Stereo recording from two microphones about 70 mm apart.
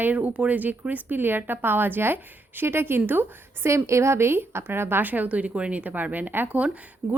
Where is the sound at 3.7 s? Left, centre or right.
Right.